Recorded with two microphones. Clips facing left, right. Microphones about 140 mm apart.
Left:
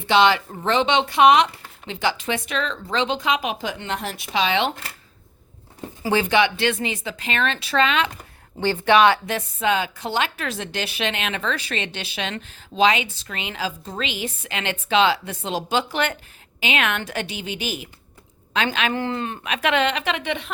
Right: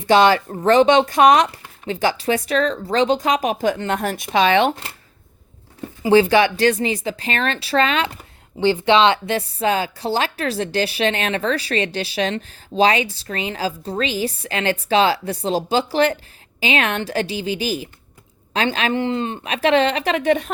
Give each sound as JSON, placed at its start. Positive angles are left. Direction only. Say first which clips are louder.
{"t": 0.1, "sound": "a woman's voice", "louder": "right 4 dB", "side_deg": -45}
{"t": 6.1, "sound": "a woman's voice", "louder": "right 6 dB", "side_deg": -35}
{"t": 8.6, "sound": "a woman's voice", "louder": "right 2 dB", "side_deg": -20}
{"t": 18.9, "sound": "a woman's voice", "louder": "right 4 dB", "side_deg": -20}